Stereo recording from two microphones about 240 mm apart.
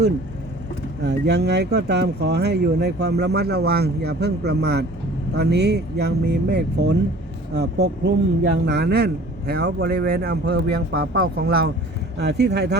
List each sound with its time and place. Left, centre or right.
1.0 s speech: right